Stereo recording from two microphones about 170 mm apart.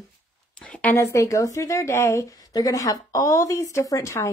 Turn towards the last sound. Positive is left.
turn(degrees=20)  # may be behind; listen again after turning